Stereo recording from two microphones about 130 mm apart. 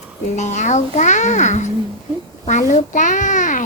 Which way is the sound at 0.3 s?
65° left (ahead or behind).